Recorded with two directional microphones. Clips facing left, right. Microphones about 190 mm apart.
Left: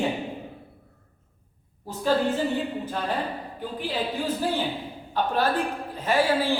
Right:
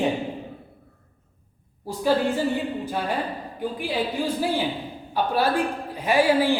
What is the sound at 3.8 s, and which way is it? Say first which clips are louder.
A woman's voice: right 2 dB; 10° right (ahead or behind).